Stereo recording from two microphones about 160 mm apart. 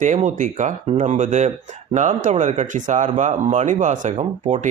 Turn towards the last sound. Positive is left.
turn(degrees=-45)  # may be behind; listen again after turning